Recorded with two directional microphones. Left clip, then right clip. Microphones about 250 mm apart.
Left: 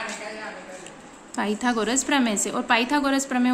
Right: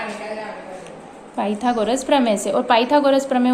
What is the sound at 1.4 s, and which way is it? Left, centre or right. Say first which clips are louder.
Speech: right 4 dB; left.